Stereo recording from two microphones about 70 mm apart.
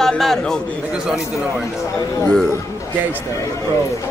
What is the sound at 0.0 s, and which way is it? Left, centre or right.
Speech, centre.